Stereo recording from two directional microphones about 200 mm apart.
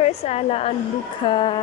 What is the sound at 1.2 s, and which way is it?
Music, 25° left (ahead or behind).